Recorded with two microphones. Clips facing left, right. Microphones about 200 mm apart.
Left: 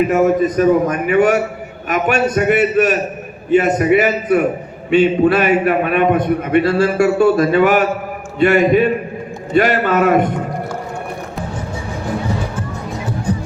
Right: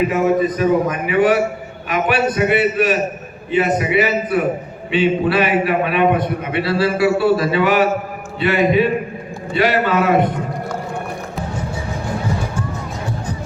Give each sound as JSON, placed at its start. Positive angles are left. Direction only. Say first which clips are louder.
{"t": 0.1, "sound": "a man's voice", "louder": "left 3 dB", "side_deg": 45}